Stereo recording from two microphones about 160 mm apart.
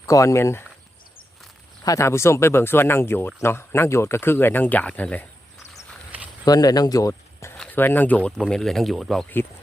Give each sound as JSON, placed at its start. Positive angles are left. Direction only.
{"t": 0.0, "sound": "speech", "side_deg": 20}
{"t": 1.8, "sound": "speech", "side_deg": 20}
{"t": 6.4, "sound": "speech", "side_deg": 25}